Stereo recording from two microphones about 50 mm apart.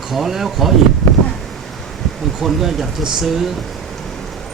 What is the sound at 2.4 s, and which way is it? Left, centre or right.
Speech, centre.